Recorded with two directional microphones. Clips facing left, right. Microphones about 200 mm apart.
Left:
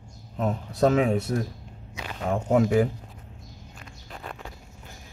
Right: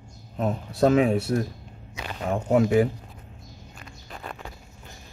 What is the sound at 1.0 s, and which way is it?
Speech, 25° right (ahead or behind).